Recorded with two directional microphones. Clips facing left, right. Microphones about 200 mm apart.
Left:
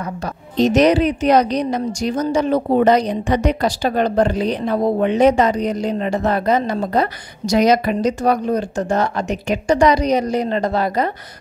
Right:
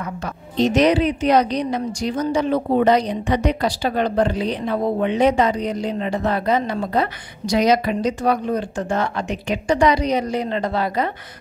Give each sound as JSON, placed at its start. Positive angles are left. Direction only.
{"t": 0.0, "sound": "a woman's voice", "side_deg": 40}